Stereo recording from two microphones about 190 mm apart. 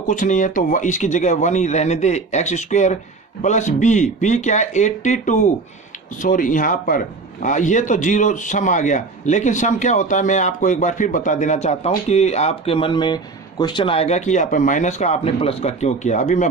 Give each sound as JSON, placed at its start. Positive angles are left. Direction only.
{"t": 0.0, "sound": "a man's voice", "side_deg": 40}